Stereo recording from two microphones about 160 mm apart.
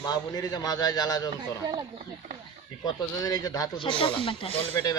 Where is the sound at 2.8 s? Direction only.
25° left (ahead or behind).